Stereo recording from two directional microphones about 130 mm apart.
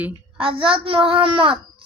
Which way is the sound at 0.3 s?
45° right (ahead or behind).